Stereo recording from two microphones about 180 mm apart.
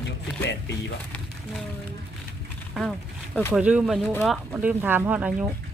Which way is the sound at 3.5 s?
5° right (ahead or behind).